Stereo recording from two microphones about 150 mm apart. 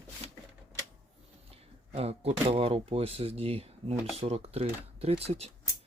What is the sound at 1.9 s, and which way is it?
Speech, 40° right (ahead or behind).